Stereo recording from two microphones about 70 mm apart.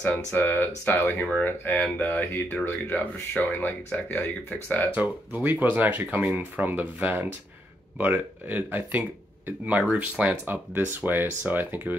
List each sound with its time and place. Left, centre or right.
0.3 s speech: left
5.4 s speech: right